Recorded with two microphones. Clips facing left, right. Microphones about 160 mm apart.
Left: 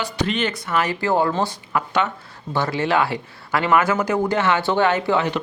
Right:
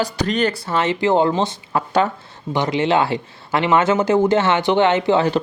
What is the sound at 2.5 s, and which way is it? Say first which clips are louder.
Speech: right 3 dB; 20° right (ahead or behind).